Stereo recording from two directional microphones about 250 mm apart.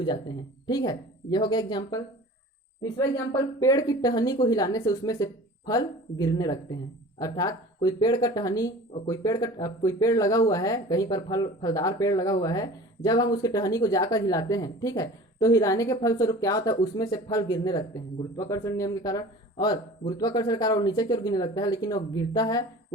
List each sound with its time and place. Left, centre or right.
0.0 s speech: centre